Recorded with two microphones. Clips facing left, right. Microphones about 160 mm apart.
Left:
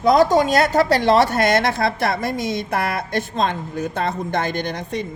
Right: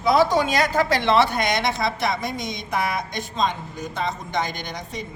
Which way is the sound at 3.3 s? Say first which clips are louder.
Left 1 dB; 60° left (ahead or behind).